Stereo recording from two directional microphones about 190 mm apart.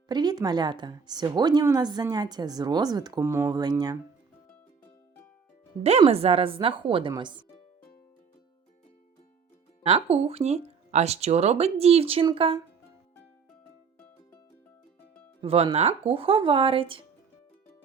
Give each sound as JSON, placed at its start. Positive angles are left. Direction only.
{"t": 0.1, "sound": "a woman's voice", "side_deg": -20}
{"t": 5.8, "sound": "a woman's voice", "side_deg": -30}
{"t": 9.8, "sound": "speech", "side_deg": -30}
{"t": 15.4, "sound": "a woman's voice", "side_deg": -30}